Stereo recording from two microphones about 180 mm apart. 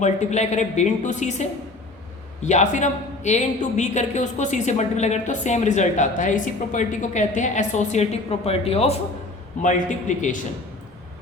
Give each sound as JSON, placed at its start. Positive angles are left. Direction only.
{"t": 0.0, "sound": "a woman's voice", "side_deg": 40}